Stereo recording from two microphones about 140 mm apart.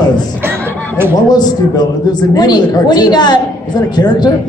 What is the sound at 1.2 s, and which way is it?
A woman's voice, 30° left (ahead or behind).